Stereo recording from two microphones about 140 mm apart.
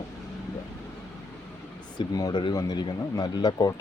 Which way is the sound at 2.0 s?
25° left (ahead or behind).